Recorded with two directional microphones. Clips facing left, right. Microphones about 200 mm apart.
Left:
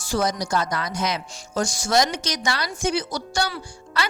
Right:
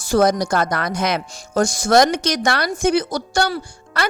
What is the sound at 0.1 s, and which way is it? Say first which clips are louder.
Speech: right 7 dB; 55° right (ahead or behind).